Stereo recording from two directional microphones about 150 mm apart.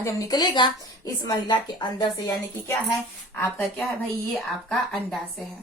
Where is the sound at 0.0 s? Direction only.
25° left (ahead or behind).